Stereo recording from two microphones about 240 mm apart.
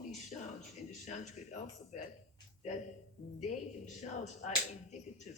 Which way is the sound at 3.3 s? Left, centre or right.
Left.